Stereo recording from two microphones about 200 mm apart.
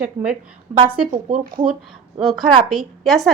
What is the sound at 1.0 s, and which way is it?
Speech, 40° right (ahead or behind).